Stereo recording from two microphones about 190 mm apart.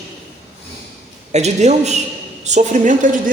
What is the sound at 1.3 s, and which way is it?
A man's voice, 35° right (ahead or behind).